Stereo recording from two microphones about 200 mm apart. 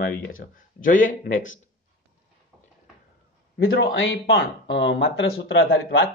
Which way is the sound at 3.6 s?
90° left.